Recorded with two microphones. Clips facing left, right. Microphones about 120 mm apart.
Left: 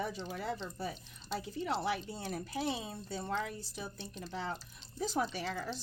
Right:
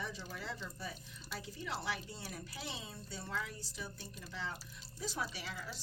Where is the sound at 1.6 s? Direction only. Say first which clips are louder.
Left 7 dB; 45° left (ahead or behind).